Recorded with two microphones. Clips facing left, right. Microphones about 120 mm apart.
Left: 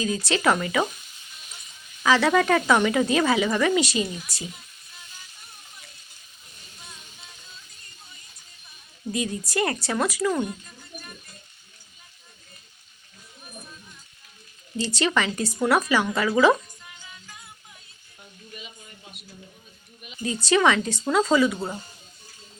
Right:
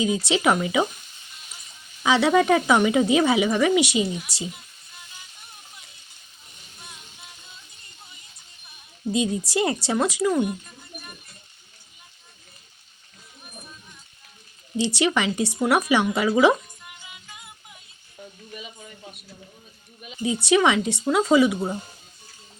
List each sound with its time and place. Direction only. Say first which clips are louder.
0.3 s speech: left 2 dB; 15° right (ahead or behind)
2.0 s speech: right 1 dB; 20° right (ahead or behind)
9.1 s speech: right 3 dB; 20° right (ahead or behind)
14.9 s speech: even; 15° right (ahead or behind)
20.2 s speech: right 1 dB; 15° right (ahead or behind)